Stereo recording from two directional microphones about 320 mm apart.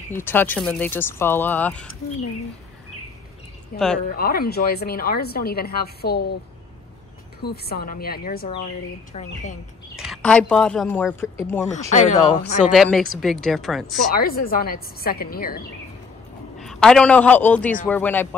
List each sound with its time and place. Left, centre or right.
0.1 s speech: centre
3.7 s speech: centre
4.1 s speech: left
7.4 s speech: left
9.9 s speech: centre
11.9 s speech: left
12.7 s speech: centre
14.1 s speech: left
16.5 s a man's voice: centre